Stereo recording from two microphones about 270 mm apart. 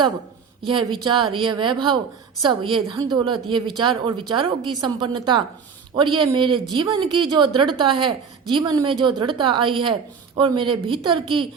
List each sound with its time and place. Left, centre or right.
0.7 s speech: centre